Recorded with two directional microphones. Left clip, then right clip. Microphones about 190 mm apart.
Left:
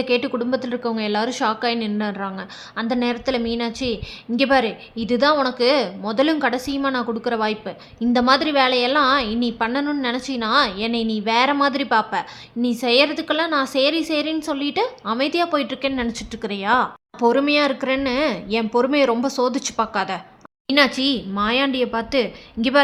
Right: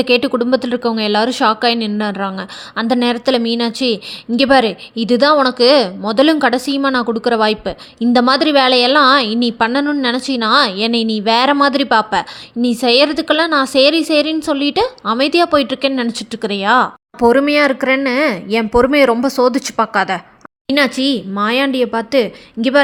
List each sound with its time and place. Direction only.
0.0 s a woman's voice: 35° right (ahead or behind)